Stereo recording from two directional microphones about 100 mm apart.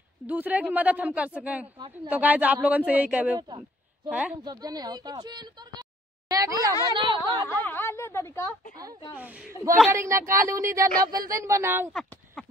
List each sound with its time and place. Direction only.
0.3 s speech: 15° right (ahead or behind)
3.3 s a sound: 50° right (ahead or behind)
4.1 s speech: 15° right (ahead or behind)
4.5 s speech: 40° right (ahead or behind)
6.9 s speech: 50° right (ahead or behind)
7.4 s a sound: 20° left (ahead or behind)
9.2 s speech: 15° right (ahead or behind)
9.8 s speech: 30° right (ahead or behind)
12.4 s clip-clop: 5° left (ahead or behind)